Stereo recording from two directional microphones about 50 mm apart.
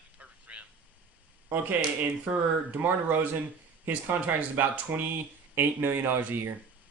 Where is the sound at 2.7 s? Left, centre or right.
Right.